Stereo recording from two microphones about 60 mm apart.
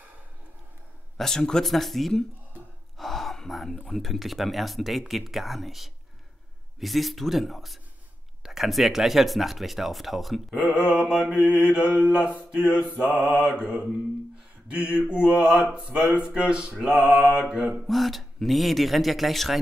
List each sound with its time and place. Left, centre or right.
1.1 s speech: centre
3.0 s gasp: centre
3.9 s speech: centre
10.5 s speech: centre
12.4 s mantra: centre
13.6 s speech: centre
17.8 s speech: centre